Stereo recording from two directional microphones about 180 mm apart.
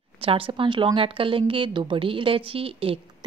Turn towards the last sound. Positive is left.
turn(degrees=-30)  # may be behind; listen again after turning